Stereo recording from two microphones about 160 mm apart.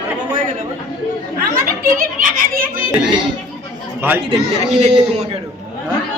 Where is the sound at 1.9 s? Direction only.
60° right (ahead or behind).